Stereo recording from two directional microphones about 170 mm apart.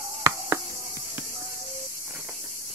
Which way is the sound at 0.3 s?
20° right (ahead or behind).